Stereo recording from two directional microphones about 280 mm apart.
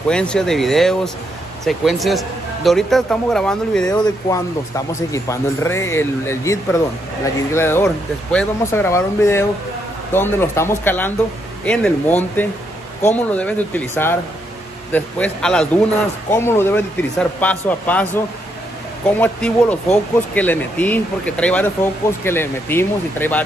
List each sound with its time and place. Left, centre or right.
0.1 s speech: centre